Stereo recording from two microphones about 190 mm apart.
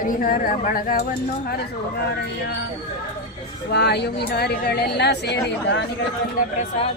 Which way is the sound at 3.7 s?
60° left (ahead or behind).